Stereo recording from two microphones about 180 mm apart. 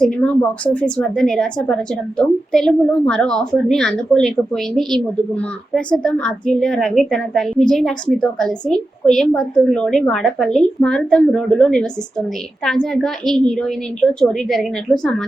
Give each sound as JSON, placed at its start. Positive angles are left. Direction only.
{"t": 0.0, "sound": "a woman's voice", "side_deg": 5}